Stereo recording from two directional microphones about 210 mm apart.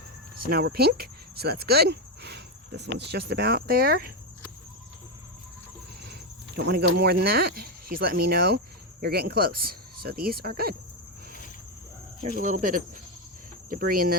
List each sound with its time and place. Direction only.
0.3 s speech: 45° right (ahead or behind)
6.7 s speech: 50° right (ahead or behind)
12.4 s speech: 40° right (ahead or behind)